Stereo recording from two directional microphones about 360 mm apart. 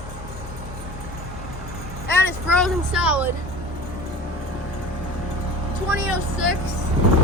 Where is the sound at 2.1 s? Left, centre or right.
Centre.